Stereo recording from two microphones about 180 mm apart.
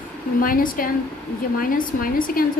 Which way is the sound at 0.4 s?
50° left (ahead or behind).